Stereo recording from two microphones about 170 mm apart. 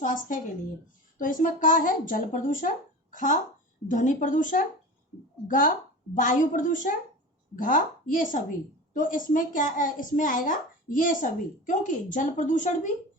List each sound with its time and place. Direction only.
0.0 s a woman's voice: 50° left (ahead or behind)